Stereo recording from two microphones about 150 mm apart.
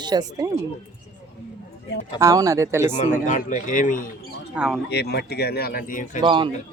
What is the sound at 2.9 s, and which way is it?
A man's voice, 55° left (ahead or behind).